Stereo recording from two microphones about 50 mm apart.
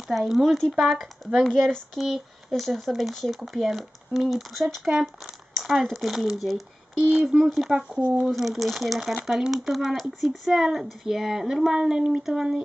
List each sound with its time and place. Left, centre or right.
0.1 s speech: centre
7.7 s speech: centre
8.3 s speech: centre